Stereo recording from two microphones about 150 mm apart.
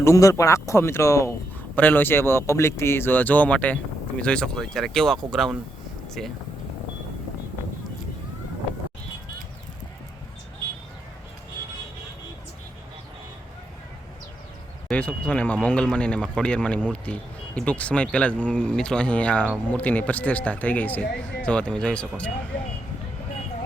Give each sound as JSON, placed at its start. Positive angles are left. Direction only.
{"t": 0.0, "sound": "speech", "side_deg": 20}
{"t": 14.8, "sound": "speech", "side_deg": 10}